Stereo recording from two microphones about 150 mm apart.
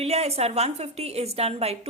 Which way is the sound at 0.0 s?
45° right (ahead or behind).